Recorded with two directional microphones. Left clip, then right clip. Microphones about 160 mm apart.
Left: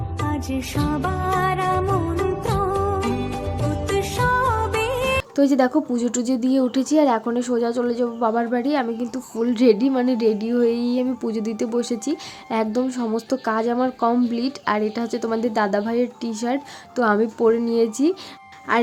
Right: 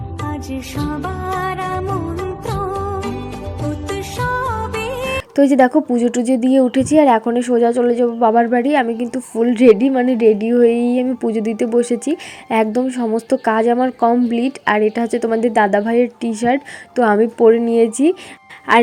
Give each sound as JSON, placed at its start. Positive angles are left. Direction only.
{"t": 0.3, "sound": "music", "side_deg": 0}
{"t": 5.4, "sound": "a woman's voice", "side_deg": -25}